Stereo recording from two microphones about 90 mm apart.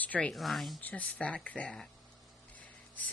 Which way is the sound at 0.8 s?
15° left (ahead or behind).